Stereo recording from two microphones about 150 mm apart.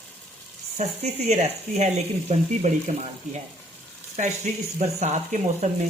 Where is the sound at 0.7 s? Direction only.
50° right (ahead or behind).